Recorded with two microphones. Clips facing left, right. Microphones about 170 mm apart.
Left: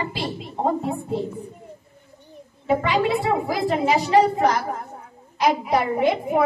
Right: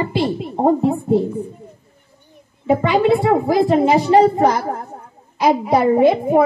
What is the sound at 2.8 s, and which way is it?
Speech, 55° right (ahead or behind).